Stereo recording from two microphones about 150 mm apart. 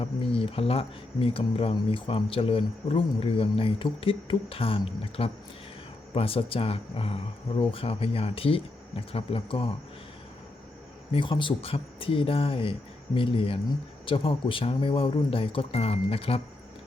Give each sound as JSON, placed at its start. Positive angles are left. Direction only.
{"t": 0.0, "sound": "speech", "side_deg": 40}
{"t": 11.1, "sound": "speech", "side_deg": 35}